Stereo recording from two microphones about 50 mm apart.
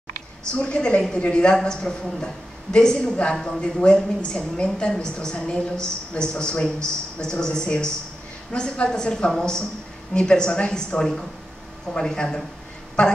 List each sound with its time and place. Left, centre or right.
0.6 s a woman's voice: centre